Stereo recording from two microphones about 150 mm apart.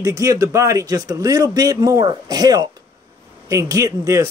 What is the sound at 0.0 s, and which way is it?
Speech, 20° right (ahead or behind).